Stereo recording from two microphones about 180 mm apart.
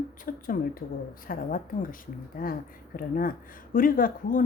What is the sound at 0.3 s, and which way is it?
Speech, 50° left (ahead or behind).